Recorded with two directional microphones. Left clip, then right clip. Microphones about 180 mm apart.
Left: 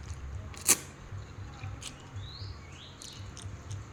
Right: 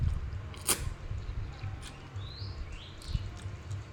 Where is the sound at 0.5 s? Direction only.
10° left (ahead or behind).